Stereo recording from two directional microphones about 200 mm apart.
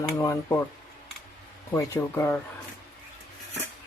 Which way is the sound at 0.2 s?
15° left (ahead or behind).